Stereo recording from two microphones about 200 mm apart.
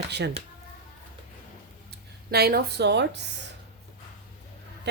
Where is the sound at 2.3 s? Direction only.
50° right (ahead or behind).